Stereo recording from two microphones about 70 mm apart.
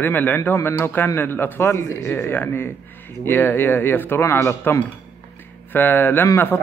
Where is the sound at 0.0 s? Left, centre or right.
Left.